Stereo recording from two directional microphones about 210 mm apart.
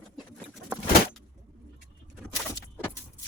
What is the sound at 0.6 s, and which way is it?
Vehicle, 5° right (ahead or behind).